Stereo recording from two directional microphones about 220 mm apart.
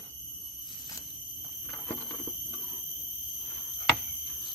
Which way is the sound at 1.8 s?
10° left (ahead or behind).